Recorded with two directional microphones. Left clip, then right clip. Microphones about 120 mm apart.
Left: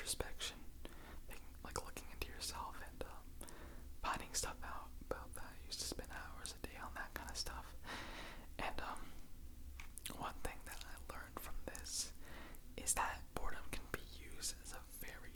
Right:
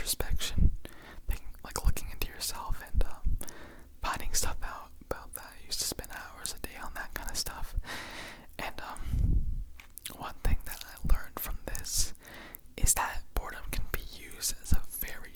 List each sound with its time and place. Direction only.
0.0 s whispering: 25° right (ahead or behind)